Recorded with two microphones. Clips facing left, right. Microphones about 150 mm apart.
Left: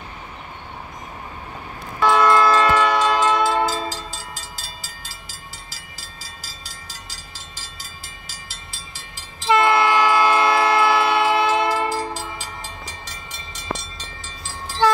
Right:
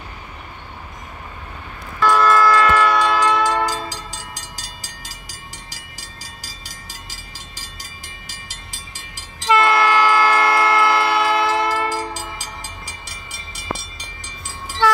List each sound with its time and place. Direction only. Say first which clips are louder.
2.0 s vehicle: even; 20° left (ahead or behind)
3.6 s train: left 1 dB; 15° right (ahead or behind)
9.6 s train: right 1 dB; 20° left (ahead or behind)
11.1 s train: even; centre (ahead or behind)
11.9 s train: even; 15° right (ahead or behind)